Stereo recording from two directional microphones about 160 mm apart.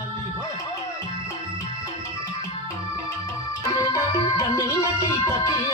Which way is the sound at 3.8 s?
25° left (ahead or behind).